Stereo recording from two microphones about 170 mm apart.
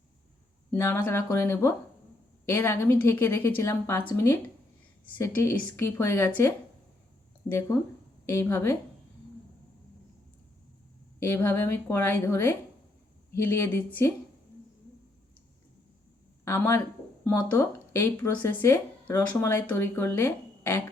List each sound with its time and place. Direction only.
0.7 s a woman's voice: 10° left (ahead or behind)
11.2 s a woman's voice: 15° left (ahead or behind)
16.4 s a woman's voice: 15° left (ahead or behind)